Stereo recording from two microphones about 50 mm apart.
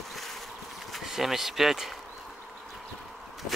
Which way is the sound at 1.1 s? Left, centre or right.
Centre.